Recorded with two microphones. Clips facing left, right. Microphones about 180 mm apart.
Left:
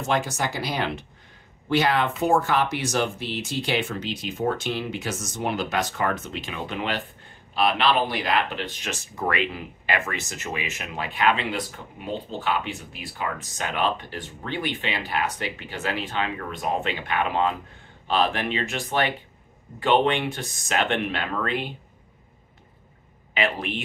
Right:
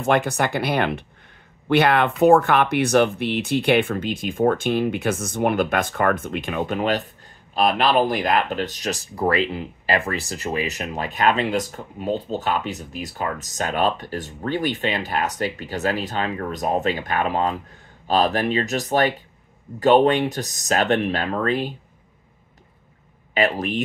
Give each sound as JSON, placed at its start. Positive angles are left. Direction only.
{"t": 0.0, "sound": "speech", "side_deg": -60}
{"t": 23.3, "sound": "speech", "side_deg": -40}